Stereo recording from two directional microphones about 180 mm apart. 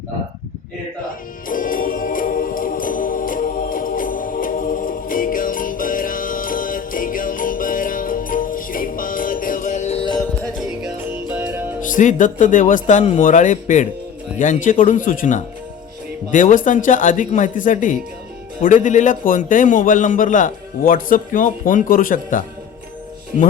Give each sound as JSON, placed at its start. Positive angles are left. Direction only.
{"t": 1.5, "sound": "music", "side_deg": 50}
{"t": 11.3, "sound": "music", "side_deg": -10}
{"t": 11.9, "sound": "a man's voice", "side_deg": 45}